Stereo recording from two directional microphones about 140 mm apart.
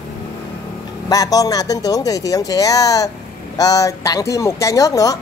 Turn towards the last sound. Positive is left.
turn(degrees=25)  # may be behind; listen again after turning